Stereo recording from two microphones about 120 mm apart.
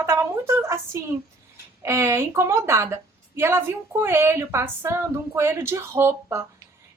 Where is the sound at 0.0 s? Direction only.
20° right (ahead or behind).